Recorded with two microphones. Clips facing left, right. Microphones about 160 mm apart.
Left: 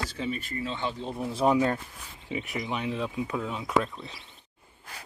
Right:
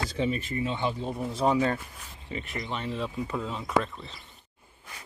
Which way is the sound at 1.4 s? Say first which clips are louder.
Left 1 dB; 10° left (ahead or behind).